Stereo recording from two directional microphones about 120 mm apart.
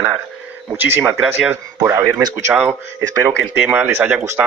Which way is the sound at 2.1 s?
25° right (ahead or behind).